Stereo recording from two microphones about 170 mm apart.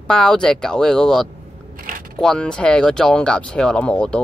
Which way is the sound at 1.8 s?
50° right (ahead or behind).